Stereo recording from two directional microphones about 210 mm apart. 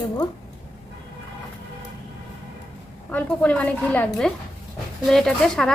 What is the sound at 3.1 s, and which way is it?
A woman's voice, 5° left (ahead or behind).